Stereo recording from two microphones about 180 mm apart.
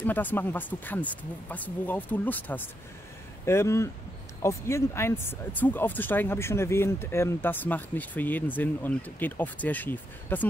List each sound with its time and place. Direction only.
0.0 s speech: 10° left (ahead or behind)